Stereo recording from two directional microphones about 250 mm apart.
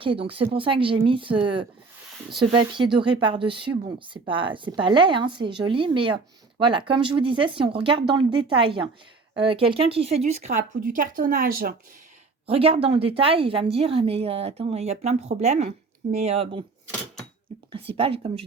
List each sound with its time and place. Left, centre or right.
0.0 s speech: right
12.5 s speech: right
17.7 s speech: right